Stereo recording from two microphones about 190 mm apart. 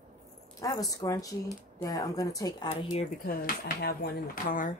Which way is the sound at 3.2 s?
50° left (ahead or behind).